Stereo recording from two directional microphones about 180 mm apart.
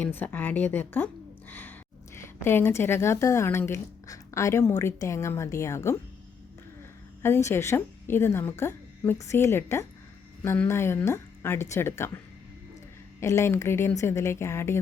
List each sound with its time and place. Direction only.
0.0 s a woman's voice: 10° left (ahead or behind)
7.2 s a woman's voice: 15° left (ahead or behind)